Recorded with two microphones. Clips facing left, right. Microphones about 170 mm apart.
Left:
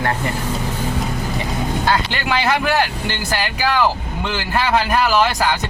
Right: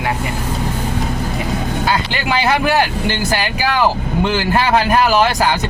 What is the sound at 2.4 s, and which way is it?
Speech, 10° right (ahead or behind).